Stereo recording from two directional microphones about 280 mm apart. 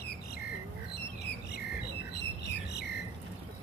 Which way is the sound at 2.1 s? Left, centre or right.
Left.